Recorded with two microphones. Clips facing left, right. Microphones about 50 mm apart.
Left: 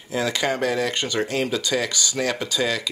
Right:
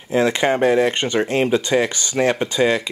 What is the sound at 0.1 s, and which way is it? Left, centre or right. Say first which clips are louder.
Speech: right 6 dB; right.